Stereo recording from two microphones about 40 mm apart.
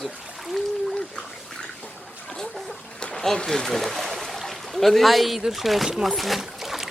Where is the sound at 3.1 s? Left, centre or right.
Centre.